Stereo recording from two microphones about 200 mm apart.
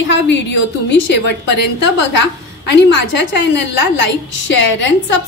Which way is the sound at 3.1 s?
60° left (ahead or behind).